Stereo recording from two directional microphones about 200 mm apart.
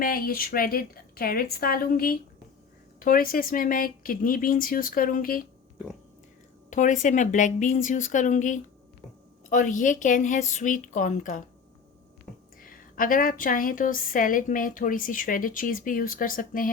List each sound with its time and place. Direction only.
0.0 s a woman's voice: 45° left (ahead or behind)
6.7 s a woman's voice: 40° left (ahead or behind)
12.5 s a woman's voice: 45° left (ahead or behind)